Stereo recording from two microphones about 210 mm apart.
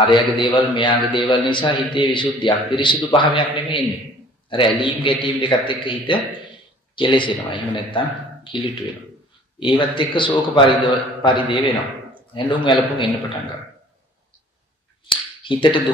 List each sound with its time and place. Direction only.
0.0 s a man's voice: 25° left (ahead or behind)
15.0 s speech: 25° left (ahead or behind)